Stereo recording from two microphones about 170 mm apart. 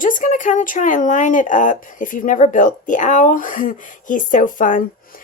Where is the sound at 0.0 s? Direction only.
50° left (ahead or behind).